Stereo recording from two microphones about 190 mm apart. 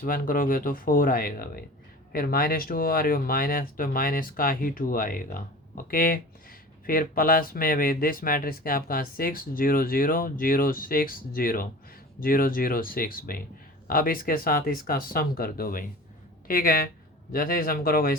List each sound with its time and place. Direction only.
0.0 s speech: 45° left (ahead or behind)